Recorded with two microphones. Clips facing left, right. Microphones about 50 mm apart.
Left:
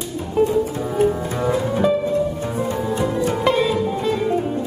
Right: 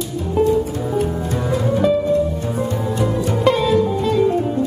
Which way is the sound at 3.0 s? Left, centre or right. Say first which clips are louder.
Right 2 dB; centre.